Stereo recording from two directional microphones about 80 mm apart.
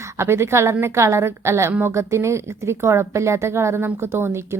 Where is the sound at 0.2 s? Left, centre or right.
Right.